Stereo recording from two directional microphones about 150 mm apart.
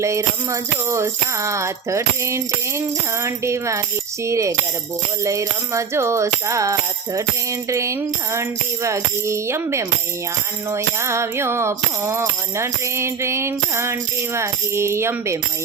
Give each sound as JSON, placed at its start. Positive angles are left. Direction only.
{"t": 0.0, "sound": "speech", "side_deg": -20}
{"t": 10.7, "sound": "music", "side_deg": -20}